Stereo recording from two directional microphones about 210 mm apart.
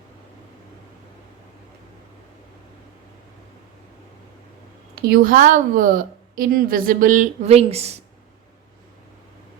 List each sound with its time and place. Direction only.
4.9 s a woman's voice: 45° right (ahead or behind); by 8.0 s 30° right (ahead or behind)